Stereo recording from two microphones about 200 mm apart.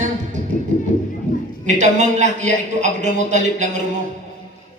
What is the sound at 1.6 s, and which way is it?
A man's voice, 35° right (ahead or behind).